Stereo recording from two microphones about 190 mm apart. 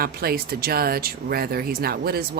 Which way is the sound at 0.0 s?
50° right (ahead or behind).